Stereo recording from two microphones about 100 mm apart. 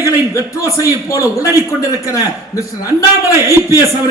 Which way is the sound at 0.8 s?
35° left (ahead or behind).